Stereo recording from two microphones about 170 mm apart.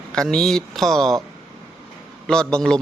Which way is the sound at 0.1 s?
5° left (ahead or behind).